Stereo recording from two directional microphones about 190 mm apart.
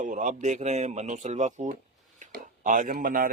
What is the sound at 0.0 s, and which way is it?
Speech, 40° right (ahead or behind).